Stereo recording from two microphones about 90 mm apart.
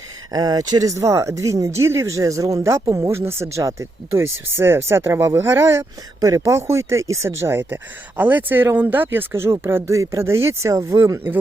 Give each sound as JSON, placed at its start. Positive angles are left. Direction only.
{"t": 0.3, "sound": "speech", "side_deg": -45}